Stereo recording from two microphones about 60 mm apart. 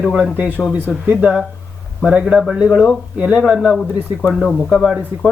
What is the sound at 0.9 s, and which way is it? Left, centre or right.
Speech, right.